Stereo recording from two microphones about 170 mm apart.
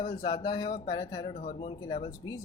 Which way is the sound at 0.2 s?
25° left (ahead or behind).